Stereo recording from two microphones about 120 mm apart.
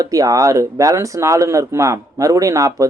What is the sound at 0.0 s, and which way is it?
Speech, 30° right (ahead or behind).